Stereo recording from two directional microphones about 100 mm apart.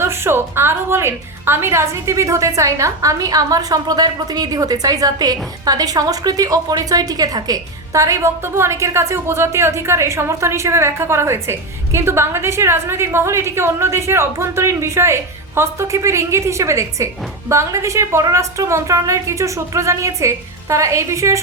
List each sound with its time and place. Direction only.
0.0 s a woman's voice: 25° right (ahead or behind)